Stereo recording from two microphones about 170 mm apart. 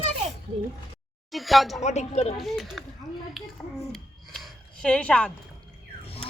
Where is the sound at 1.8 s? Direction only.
40° left (ahead or behind).